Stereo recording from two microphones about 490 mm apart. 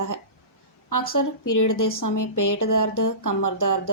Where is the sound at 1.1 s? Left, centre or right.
Left.